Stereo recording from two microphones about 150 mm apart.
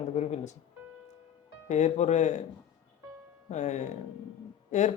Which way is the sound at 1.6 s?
50° left (ahead or behind).